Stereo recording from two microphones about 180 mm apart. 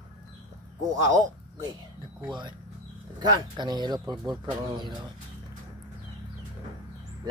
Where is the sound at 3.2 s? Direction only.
25° right (ahead or behind).